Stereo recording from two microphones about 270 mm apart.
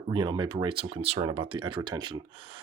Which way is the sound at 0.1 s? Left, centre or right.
Centre.